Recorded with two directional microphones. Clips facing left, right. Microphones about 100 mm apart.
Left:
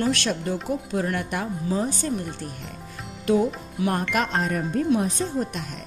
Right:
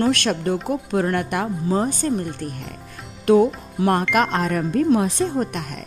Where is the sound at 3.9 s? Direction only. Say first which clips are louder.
Right 6 dB; 70° right (ahead or behind).